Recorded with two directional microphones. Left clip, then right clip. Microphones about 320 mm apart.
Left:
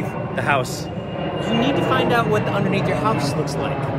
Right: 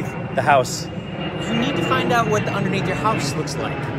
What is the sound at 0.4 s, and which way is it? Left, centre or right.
A man's voice, centre.